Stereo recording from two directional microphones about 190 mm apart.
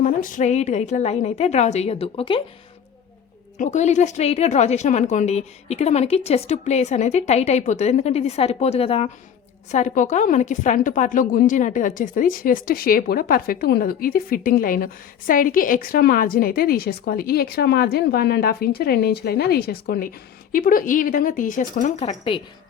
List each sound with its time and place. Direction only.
0.0 s a woman's voice: 45° left (ahead or behind)
3.6 s a woman's voice: 40° left (ahead or behind)